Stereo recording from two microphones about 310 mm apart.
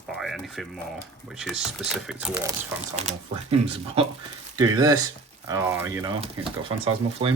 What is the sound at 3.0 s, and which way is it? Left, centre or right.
Speech, centre.